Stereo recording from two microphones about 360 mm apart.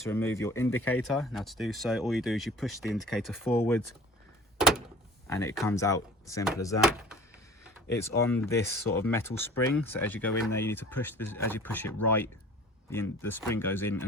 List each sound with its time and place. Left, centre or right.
0.1 s speech: centre
5.3 s speech: centre
7.9 s speech: centre